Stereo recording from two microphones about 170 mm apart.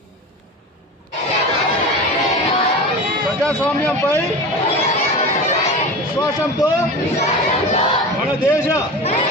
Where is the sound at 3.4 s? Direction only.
5° left (ahead or behind).